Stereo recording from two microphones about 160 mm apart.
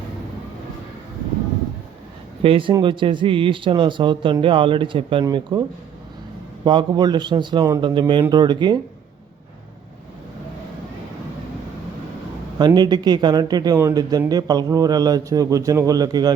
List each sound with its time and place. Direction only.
2.4 s a man's voice: 35° right (ahead or behind)
6.7 s a man's voice: 30° right (ahead or behind)
12.5 s a man's voice: 25° right (ahead or behind)